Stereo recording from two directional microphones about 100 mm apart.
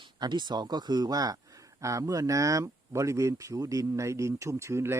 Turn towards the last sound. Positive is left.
turn(degrees=-25)  # may be behind; listen again after turning